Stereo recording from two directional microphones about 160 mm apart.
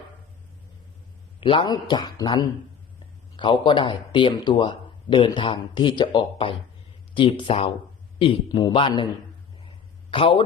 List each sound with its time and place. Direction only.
1.4 s a man's voice: 30° left (ahead or behind)
10.1 s speech: 35° left (ahead or behind)